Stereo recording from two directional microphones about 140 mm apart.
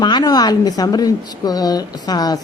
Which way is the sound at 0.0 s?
30° left (ahead or behind).